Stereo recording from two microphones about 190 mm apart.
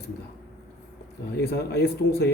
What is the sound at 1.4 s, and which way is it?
Speech, 60° left (ahead or behind).